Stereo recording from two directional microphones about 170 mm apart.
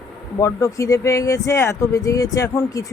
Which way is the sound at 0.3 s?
20° left (ahead or behind).